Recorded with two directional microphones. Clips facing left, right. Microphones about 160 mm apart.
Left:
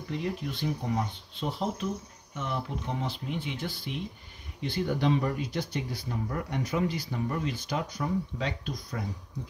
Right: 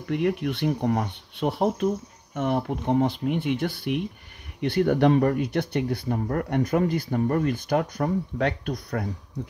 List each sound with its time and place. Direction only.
0.1 s speech: 65° right (ahead or behind)